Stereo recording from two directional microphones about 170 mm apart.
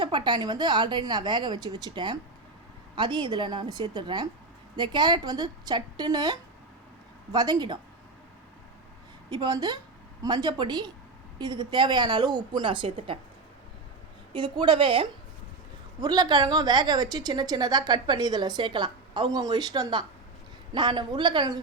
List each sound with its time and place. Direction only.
0.0 s a woman's voice: 25° right (ahead or behind)
9.3 s a woman's voice: 25° right (ahead or behind)
14.3 s a woman's voice: 30° right (ahead or behind)